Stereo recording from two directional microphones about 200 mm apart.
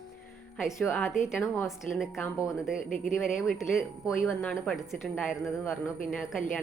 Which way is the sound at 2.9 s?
40° left (ahead or behind).